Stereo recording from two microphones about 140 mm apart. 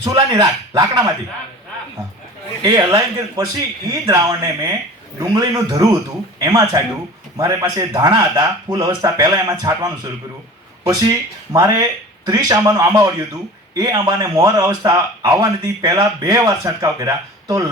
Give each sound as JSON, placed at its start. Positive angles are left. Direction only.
{"t": 0.0, "sound": "speech", "side_deg": -30}
{"t": 2.6, "sound": "speech", "side_deg": -30}
{"t": 11.5, "sound": "speech", "side_deg": -30}